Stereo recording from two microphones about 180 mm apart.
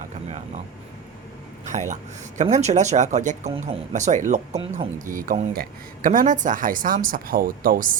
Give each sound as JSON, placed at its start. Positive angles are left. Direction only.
{"t": 1.6, "sound": "speech", "side_deg": -40}